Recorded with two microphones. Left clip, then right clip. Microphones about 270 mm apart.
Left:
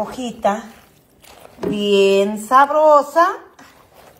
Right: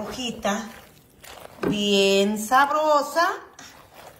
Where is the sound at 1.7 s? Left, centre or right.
Centre.